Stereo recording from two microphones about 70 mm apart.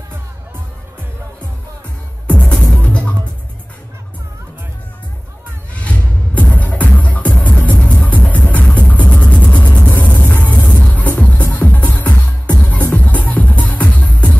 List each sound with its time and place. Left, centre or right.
2.2 s music: centre
5.8 s music: centre